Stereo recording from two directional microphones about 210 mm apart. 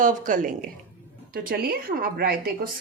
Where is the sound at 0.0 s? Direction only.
40° right (ahead or behind).